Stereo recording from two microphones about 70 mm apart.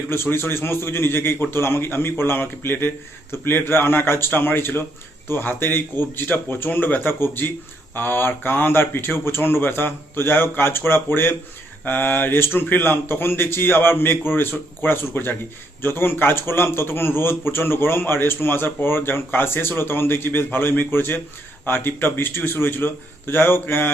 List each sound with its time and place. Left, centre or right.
0.1 s speech: left